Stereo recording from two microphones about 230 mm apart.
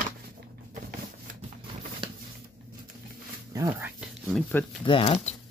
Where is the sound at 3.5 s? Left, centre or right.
Centre.